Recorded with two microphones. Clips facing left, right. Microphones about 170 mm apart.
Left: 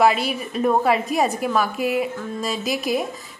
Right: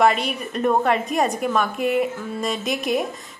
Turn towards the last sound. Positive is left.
turn(degrees=0)  # may be behind; listen again after turning